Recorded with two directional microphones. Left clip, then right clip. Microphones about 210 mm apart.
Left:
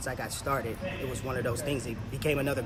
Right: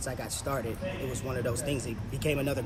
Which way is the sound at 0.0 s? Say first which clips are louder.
Left 1 dB; 10° left (ahead or behind).